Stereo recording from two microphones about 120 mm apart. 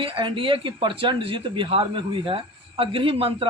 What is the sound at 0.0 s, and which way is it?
Speech, 45° right (ahead or behind).